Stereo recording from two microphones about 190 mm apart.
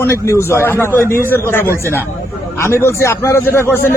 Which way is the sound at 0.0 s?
15° left (ahead or behind).